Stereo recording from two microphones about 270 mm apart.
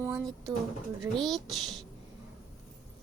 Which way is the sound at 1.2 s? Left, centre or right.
Centre.